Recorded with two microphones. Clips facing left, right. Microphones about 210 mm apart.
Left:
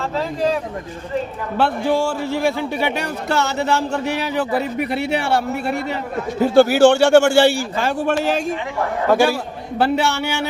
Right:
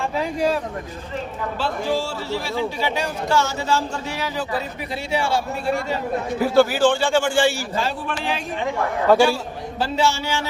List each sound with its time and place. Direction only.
1.5 s speech: 60° left (ahead or behind)
6.4 s a man's voice: 25° left (ahead or behind)
6.7 s speech: 70° left (ahead or behind); by 8.4 s 45° left (ahead or behind)
9.7 s speech: 60° left (ahead or behind)